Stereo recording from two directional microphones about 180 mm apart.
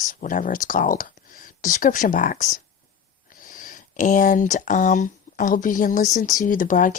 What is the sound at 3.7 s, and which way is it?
Speech, 40° left (ahead or behind).